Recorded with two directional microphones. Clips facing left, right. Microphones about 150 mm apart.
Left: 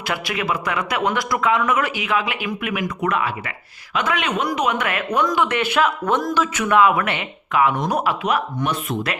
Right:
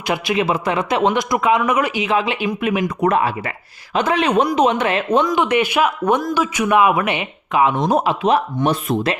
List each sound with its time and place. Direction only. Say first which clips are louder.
0.0 s a man's voice: right 6 dB; 20° right (ahead or behind)
5.2 s a man's voice: right 3 dB; 15° right (ahead or behind); by 9.1 s 35° right (ahead or behind)